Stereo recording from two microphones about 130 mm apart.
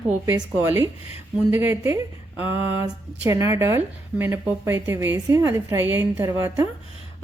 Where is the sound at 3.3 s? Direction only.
25° right (ahead or behind).